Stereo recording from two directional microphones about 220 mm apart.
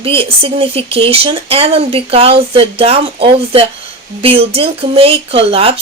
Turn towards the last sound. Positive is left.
turn(degrees=-25)  # may be behind; listen again after turning